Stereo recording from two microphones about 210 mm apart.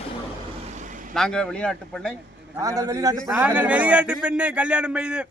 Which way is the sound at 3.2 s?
5° right (ahead or behind).